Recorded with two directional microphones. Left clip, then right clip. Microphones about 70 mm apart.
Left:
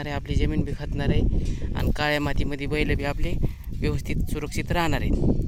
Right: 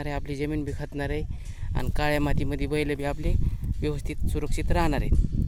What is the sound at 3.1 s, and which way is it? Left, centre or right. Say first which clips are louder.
Speech: left 2 dB; centre.